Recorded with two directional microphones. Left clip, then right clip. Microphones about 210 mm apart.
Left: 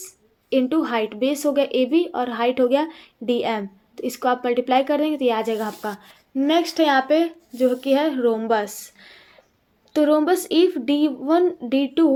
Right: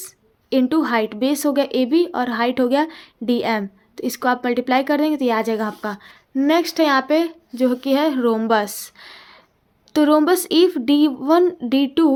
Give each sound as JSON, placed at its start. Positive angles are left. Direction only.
{"t": 0.5, "sound": "speech", "side_deg": -35}